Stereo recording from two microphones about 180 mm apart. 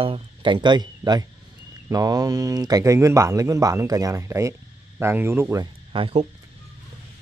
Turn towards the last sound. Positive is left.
turn(degrees=-30)  # may be behind; listen again after turning